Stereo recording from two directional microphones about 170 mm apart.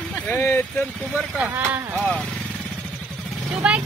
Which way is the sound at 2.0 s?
5° left (ahead or behind).